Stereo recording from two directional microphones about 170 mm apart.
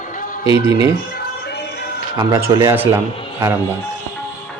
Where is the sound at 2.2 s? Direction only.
20° right (ahead or behind).